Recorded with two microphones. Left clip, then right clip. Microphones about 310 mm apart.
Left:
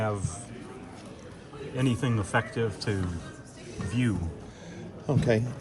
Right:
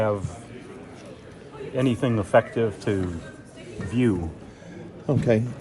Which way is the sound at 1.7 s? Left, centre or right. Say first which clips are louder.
Right 6 dB; centre.